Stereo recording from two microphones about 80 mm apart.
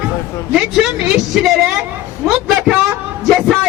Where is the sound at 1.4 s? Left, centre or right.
Centre.